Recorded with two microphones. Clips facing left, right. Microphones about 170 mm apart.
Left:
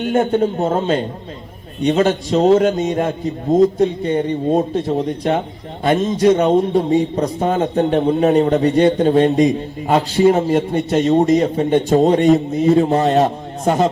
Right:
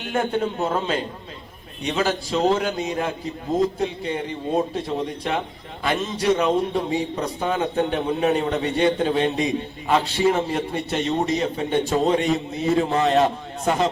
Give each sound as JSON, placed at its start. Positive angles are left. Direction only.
{"t": 0.2, "sound": "a man's voice", "side_deg": 30}
{"t": 0.4, "sound": "a man's voice", "side_deg": 40}